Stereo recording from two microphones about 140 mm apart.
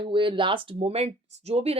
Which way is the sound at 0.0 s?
35° right (ahead or behind).